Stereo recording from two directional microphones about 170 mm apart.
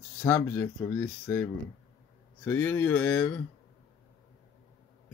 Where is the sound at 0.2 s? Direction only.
15° left (ahead or behind).